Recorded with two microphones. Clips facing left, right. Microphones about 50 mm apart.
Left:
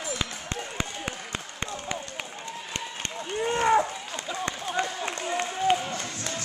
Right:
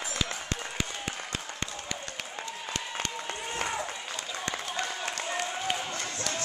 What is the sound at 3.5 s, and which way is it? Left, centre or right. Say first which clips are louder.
Run: left 12 dB; left.